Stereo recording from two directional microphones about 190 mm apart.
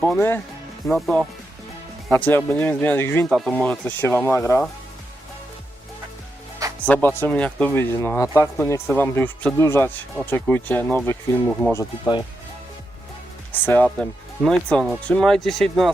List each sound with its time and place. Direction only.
0.0 s speech: 10° left (ahead or behind)
6.8 s speech: 10° left (ahead or behind)
13.5 s speech: 10° left (ahead or behind)